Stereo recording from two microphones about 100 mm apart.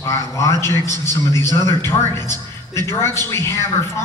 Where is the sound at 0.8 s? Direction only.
40° right (ahead or behind).